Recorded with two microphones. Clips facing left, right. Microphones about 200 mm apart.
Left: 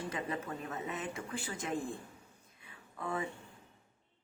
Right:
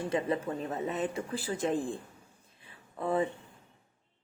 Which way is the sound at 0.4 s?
30° right (ahead or behind).